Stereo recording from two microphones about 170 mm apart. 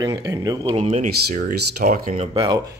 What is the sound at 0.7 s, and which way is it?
Speech, 40° right (ahead or behind).